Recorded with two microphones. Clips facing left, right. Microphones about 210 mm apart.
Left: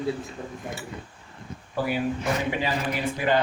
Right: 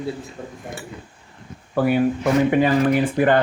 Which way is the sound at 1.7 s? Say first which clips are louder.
Right 8 dB; 55° right (ahead or behind).